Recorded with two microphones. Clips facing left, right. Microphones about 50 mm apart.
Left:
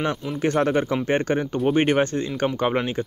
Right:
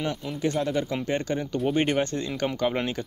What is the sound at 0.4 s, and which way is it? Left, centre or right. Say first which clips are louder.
Speech: left 5 dB; left.